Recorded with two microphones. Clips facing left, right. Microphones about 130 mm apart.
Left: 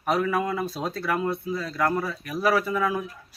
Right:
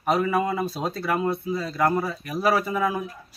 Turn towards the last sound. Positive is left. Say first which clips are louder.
# even
turn(degrees=-5)  # may be behind; listen again after turning